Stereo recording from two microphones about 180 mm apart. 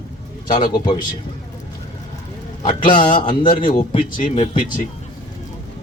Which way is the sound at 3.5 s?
45° left (ahead or behind).